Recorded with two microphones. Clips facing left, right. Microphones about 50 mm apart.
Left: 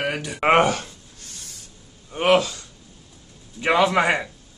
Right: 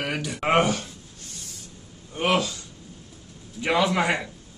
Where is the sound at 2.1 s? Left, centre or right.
Left.